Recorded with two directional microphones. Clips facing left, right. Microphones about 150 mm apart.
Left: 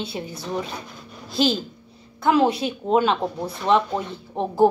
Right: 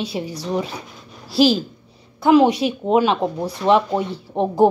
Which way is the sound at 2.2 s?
15° right (ahead or behind).